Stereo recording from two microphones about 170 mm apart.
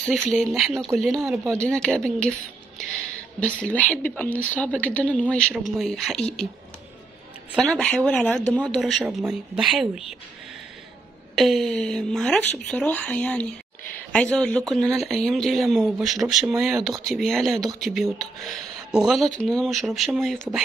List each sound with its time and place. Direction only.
0.3 s speech: centre (ahead or behind)
1.2 s speech: 15° right (ahead or behind)
1.6 s speech: 5° left (ahead or behind)
2.8 s a sound: 5° left (ahead or behind)
4.2 s speech: 10° left (ahead or behind)
7.5 s speech: centre (ahead or behind)
11.3 s speech: centre (ahead or behind)